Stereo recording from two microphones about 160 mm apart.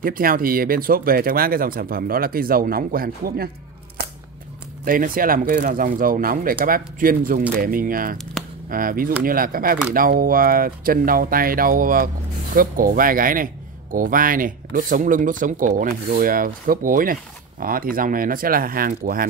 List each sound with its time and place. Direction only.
0.0 s speech: 65° right (ahead or behind)
4.8 s speech: 60° right (ahead or behind)